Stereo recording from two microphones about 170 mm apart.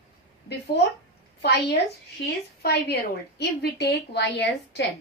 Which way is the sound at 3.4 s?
75° left (ahead or behind).